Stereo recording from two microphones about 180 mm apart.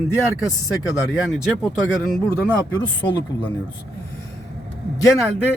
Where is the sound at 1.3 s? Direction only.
Centre (ahead or behind).